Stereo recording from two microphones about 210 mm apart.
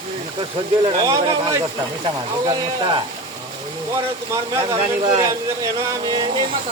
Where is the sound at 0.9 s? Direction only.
20° right (ahead or behind).